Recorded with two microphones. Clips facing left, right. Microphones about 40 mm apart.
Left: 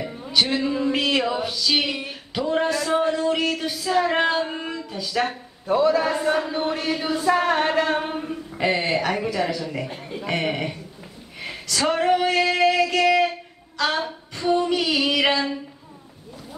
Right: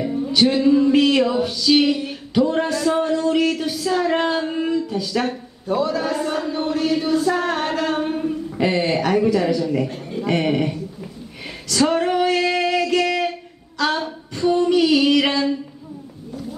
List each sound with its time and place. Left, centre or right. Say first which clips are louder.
0.0 s a sound: right 5 dB; centre
2.3 s speech: right 3 dB; centre
5.7 s a man's voice: left 2 dB; centre
6.1 s a sound: even; centre
8.5 s a woman's voice: right 1 dB; centre
11.4 s female singing: right 4 dB; centre
13.7 s a woman's voice: right 2 dB; centre